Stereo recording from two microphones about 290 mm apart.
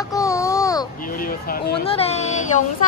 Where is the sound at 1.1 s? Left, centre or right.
Left.